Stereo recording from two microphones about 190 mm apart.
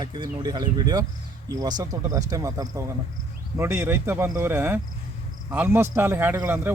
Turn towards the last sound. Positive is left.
turn(degrees=-10)  # may be behind; listen again after turning